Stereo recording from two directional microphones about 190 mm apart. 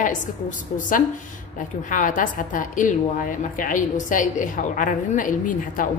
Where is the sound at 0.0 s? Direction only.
45° left (ahead or behind).